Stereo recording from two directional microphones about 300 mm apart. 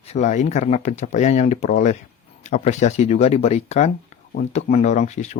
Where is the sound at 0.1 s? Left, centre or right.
Left.